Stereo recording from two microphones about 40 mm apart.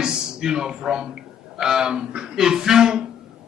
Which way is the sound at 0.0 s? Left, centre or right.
Centre.